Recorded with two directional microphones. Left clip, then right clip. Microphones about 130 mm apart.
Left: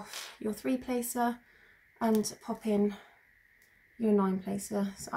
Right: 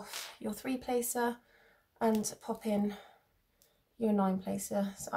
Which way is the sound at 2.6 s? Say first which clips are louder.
Left 5 dB; 35° right (ahead or behind).